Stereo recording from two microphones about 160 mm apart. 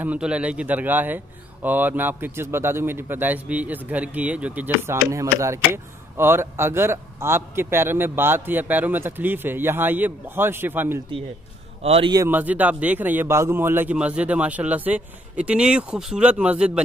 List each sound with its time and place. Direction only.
0.0 s speech: 10° right (ahead or behind)
11.8 s a man's voice: 40° right (ahead or behind)
12.3 s speech: 10° right (ahead or behind)